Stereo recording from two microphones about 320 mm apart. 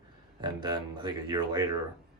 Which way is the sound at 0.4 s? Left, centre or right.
Centre.